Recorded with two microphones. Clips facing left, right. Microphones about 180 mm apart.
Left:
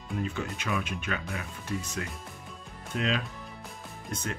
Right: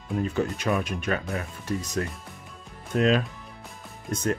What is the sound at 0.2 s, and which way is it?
Speech, 40° right (ahead or behind).